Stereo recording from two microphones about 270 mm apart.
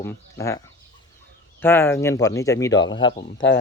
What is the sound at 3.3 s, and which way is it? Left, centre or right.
Speech, left.